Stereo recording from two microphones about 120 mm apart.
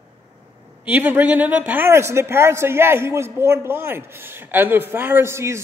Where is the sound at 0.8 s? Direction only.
15° right (ahead or behind).